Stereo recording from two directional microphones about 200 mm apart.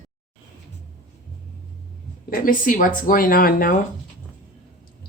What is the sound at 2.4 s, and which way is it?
A woman's voice, 40° left (ahead or behind).